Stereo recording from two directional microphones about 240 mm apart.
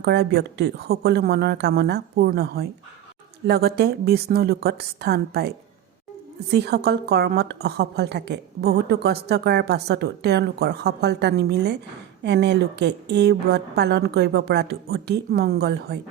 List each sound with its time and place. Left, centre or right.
0.0 s a woman's voice: right